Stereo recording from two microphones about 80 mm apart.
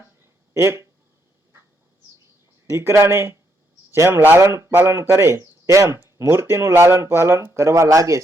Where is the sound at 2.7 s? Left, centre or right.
Right.